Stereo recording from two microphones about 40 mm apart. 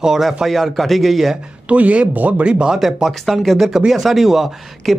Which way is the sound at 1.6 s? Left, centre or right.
Right.